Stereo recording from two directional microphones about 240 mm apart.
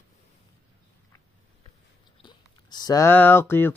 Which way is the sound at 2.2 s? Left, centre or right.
Centre.